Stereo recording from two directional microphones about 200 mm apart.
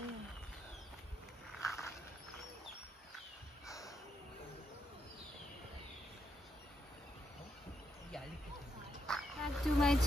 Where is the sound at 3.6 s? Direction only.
15° left (ahead or behind).